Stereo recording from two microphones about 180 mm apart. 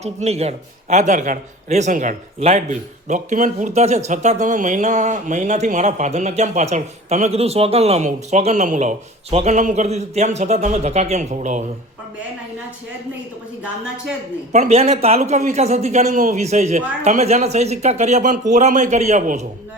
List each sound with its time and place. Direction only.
0.0 s a man's voice: 35° right (ahead or behind)
14.5 s a man's voice: 40° right (ahead or behind)